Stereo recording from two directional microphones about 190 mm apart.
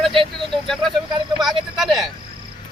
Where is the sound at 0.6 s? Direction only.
Centre (ahead or behind).